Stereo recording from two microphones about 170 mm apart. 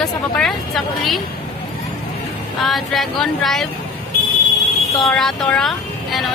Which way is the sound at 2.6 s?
Centre (ahead or behind).